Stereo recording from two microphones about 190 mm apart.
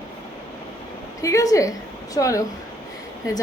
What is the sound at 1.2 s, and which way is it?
A woman's voice, 15° left (ahead or behind).